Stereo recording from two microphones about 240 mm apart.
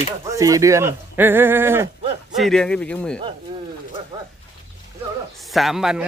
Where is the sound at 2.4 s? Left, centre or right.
Centre.